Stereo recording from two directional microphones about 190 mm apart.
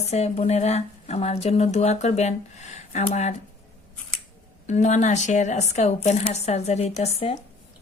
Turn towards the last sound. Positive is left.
turn(degrees=30)  # may be behind; listen again after turning